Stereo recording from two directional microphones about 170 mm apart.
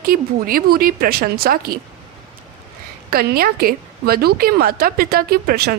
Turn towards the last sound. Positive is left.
turn(degrees=-65)  # may be behind; listen again after turning